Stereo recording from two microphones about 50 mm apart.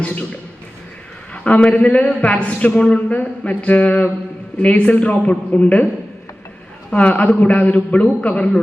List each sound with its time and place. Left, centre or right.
0.0 s speech: left
1.6 s speech: left
6.9 s speech: left